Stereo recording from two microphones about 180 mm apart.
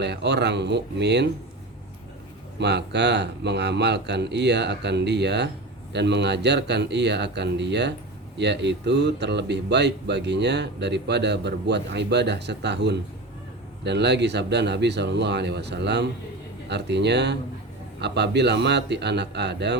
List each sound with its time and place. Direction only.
0.0 s speech: 70° right (ahead or behind)
2.6 s speech: 70° right (ahead or behind)